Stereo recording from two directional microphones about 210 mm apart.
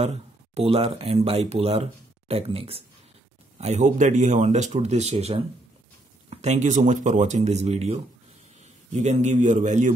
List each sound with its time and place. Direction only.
0.6 s speech: 30° right (ahead or behind)